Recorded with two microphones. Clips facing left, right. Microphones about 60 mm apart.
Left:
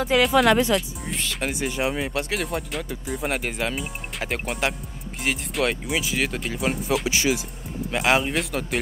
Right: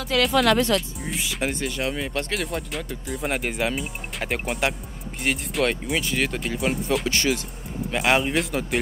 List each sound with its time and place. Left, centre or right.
0.2 s speech: centre
0.5 s speech: centre
1.0 s speech: centre
1.8 s speech: centre